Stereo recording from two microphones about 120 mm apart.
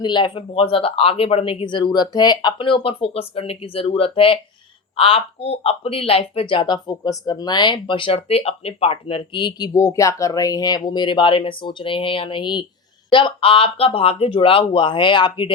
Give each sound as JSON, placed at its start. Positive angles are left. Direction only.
{"t": 0.0, "sound": "speech", "side_deg": 40}